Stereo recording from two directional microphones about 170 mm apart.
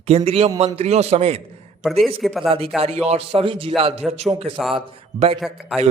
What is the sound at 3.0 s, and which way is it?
A man's voice, 35° right (ahead or behind).